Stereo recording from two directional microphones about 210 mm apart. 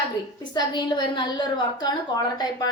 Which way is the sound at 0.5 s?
20° left (ahead or behind).